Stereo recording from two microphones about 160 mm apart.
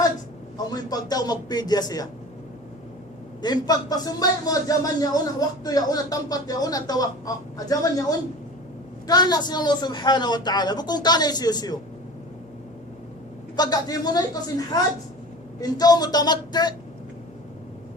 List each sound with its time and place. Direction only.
0.7 s speech: 25° left (ahead or behind)
3.4 s speech: 25° left (ahead or behind)
13.6 s speech: 25° left (ahead or behind)